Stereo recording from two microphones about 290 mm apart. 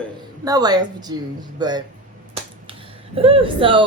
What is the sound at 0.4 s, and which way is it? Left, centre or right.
A woman's voice, centre.